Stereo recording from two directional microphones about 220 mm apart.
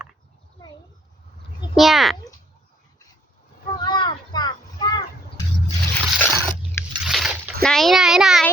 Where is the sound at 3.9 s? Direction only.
20° left (ahead or behind).